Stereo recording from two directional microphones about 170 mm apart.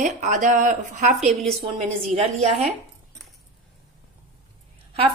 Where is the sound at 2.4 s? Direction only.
40° right (ahead or behind).